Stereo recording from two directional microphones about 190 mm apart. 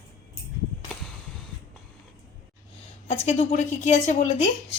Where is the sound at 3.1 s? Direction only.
35° left (ahead or behind).